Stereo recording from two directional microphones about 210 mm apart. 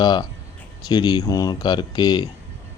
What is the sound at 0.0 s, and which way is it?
Speech, 20° left (ahead or behind).